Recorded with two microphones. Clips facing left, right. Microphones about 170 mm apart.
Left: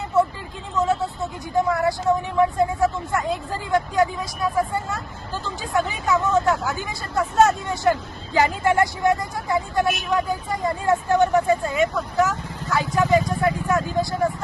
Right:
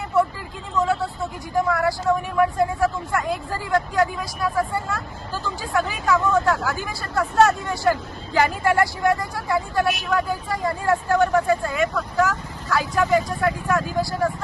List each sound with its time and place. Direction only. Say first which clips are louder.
0.1 s vehicle: left 1 dB; 20° left (ahead or behind)
1.5 s speech: left 1 dB; 20° left (ahead or behind)